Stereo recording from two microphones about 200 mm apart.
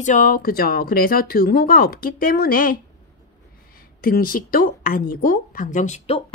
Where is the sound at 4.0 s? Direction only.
50° left (ahead or behind).